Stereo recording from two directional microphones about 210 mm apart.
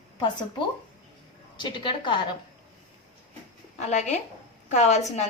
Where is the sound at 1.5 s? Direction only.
25° left (ahead or behind).